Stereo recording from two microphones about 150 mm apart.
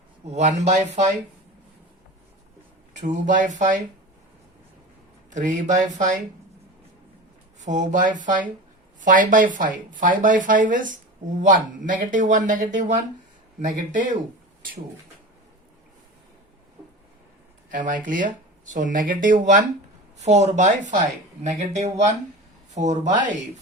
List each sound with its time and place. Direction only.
0.3 s speech: 50° right (ahead or behind)
3.1 s speech: 55° right (ahead or behind)
5.3 s speech: 55° right (ahead or behind)
7.6 s speech: 55° right (ahead or behind)
17.7 s speech: 60° right (ahead or behind)
20.2 s speech: 50° right (ahead or behind)